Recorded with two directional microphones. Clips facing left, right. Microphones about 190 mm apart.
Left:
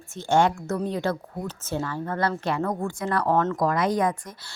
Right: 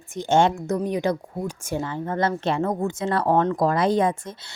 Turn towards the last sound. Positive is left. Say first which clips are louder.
# right 3 dB
turn(degrees=-25)  # may be behind; listen again after turning